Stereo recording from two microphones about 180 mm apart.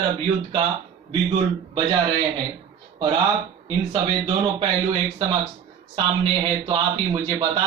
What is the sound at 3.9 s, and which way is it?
Speech, 30° right (ahead or behind).